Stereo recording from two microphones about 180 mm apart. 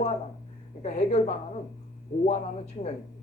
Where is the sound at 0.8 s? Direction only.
40° left (ahead or behind).